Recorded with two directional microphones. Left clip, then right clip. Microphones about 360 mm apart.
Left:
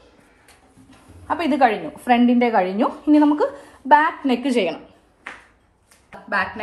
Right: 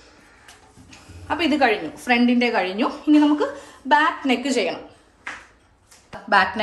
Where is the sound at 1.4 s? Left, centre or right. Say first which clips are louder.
Left 1 dB; centre.